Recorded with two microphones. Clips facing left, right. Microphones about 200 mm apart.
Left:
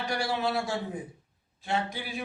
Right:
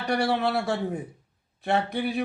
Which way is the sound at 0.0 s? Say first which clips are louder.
Right 5 dB; 60° right (ahead or behind).